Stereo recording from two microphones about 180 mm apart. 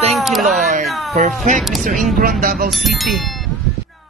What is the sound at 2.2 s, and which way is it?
Speech, 55° right (ahead or behind).